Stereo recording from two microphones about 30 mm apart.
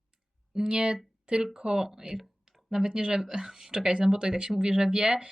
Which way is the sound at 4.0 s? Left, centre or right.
Right.